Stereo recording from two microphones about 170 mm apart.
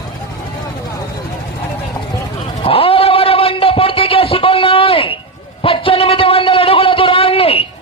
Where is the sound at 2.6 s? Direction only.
35° left (ahead or behind).